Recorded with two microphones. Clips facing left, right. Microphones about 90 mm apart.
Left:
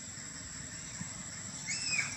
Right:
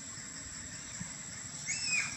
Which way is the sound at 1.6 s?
5° left (ahead or behind).